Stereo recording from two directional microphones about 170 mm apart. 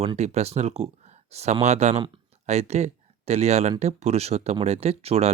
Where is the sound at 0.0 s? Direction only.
40° right (ahead or behind).